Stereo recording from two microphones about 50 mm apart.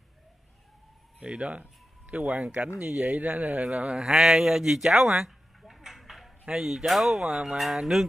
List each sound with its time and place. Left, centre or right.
1.2 s speech: right
4.0 s speech: centre
5.6 s a sound: centre
6.5 s speech: centre